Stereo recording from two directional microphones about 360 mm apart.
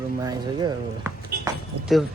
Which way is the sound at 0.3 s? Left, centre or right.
Centre.